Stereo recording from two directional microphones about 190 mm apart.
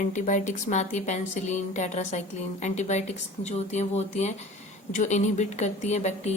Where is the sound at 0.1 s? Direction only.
40° left (ahead or behind).